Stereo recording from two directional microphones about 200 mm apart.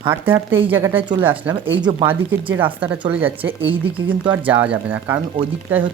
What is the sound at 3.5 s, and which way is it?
Speech, 25° right (ahead or behind).